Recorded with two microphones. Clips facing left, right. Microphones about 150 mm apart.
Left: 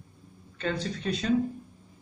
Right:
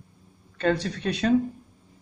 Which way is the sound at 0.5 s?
65° right (ahead or behind).